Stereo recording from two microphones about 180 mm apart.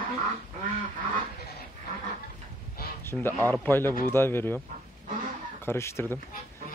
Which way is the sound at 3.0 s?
10° left (ahead or behind).